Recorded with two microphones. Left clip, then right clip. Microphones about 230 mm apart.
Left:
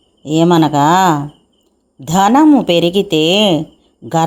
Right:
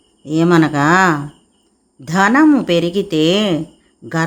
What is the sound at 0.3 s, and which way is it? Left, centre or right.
Speech, centre.